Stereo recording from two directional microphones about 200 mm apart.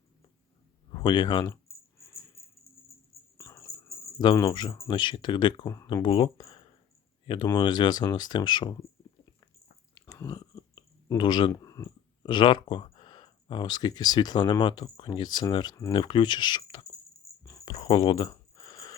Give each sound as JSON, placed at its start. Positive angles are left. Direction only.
{"t": 0.9, "sound": "speech", "side_deg": 20}
{"t": 3.3, "sound": "speech", "side_deg": 15}
{"t": 9.9, "sound": "speech", "side_deg": 15}
{"t": 17.4, "sound": "a sound", "side_deg": 20}